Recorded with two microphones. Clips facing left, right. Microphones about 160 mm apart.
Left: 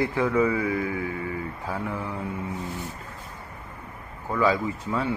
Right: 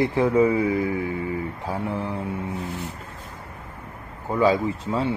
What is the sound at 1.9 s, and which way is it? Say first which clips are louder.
Mantra: right 4 dB; 35° right (ahead or behind).